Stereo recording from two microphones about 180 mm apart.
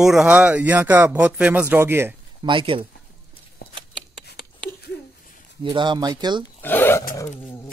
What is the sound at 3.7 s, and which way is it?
Shuffling cards, 25° right (ahead or behind).